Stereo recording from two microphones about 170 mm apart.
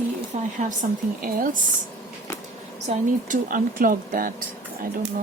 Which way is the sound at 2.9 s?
50° right (ahead or behind).